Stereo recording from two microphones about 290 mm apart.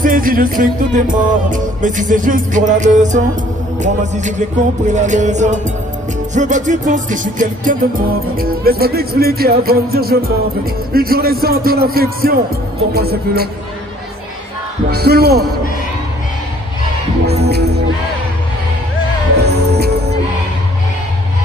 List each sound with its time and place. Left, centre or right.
0.0 s music: right
8.4 s speech: right
14.9 s speech: right
17.5 s music: right
19.4 s music: right